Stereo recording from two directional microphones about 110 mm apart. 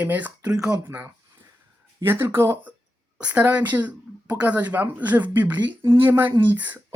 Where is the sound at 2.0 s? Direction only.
20° right (ahead or behind).